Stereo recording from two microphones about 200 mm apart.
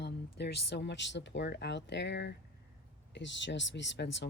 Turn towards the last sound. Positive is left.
turn(degrees=60)  # may be behind; listen again after turning